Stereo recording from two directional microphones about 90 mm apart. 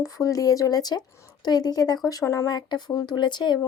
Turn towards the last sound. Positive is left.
turn(degrees=55)  # may be behind; listen again after turning